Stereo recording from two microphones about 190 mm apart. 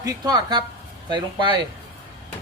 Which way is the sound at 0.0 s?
20° right (ahead or behind).